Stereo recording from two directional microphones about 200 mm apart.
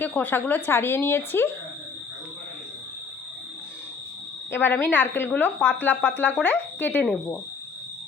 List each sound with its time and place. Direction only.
0.0 s speech: 10° left (ahead or behind)
4.5 s speech: 10° left (ahead or behind)